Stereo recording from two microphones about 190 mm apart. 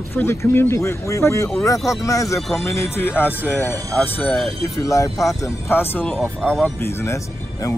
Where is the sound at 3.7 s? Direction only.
10° left (ahead or behind).